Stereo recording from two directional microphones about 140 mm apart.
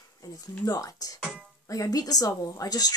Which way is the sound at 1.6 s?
25° left (ahead or behind).